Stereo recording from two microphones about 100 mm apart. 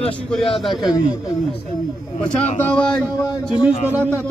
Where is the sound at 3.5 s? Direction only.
15° right (ahead or behind).